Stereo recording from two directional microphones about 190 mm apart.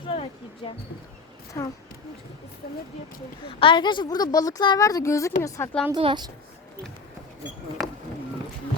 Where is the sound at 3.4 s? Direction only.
25° left (ahead or behind).